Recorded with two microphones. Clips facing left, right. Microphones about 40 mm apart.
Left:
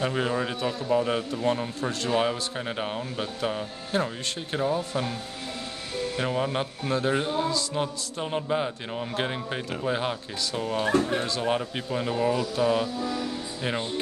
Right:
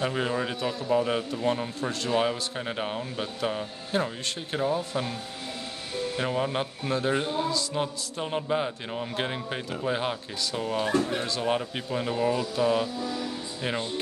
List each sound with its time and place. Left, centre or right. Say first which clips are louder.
0.0 s a man's voice: left 1 dB; centre
6.1 s a man's voice: left 1 dB; centre
10.9 s speech: left 4 dB; left
11.2 s a man's voice: left 1 dB; centre